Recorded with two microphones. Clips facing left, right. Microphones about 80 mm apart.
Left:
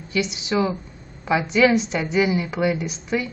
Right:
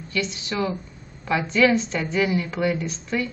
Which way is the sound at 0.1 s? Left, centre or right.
Centre.